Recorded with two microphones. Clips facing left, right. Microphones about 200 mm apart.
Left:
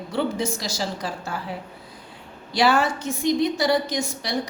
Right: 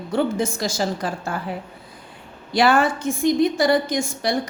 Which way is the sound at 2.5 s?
55° right (ahead or behind).